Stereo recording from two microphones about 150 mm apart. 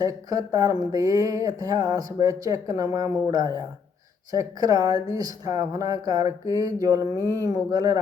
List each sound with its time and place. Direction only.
0.0 s speech: 25° right (ahead or behind)